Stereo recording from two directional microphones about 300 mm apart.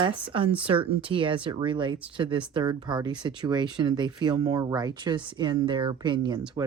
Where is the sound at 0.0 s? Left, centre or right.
Centre.